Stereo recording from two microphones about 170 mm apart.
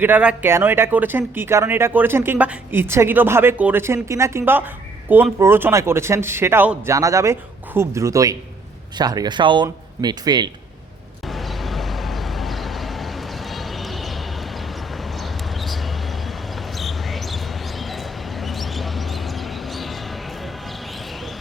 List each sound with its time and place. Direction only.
0.0 s speech: 10° right (ahead or behind); by 10.5 s 25° right (ahead or behind)
11.3 s vehicle: centre (ahead or behind)
16.7 s a sound: centre (ahead or behind)